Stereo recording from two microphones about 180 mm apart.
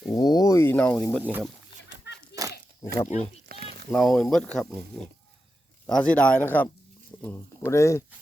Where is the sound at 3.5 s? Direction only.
60° right (ahead or behind).